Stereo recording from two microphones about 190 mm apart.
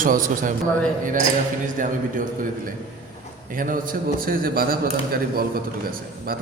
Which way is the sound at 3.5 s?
45° right (ahead or behind).